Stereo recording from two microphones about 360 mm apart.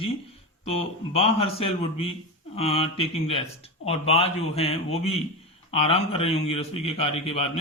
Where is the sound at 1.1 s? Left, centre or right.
Centre.